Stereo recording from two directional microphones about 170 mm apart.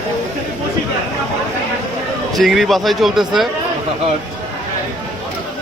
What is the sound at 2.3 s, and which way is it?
A man's voice, centre (ahead or behind).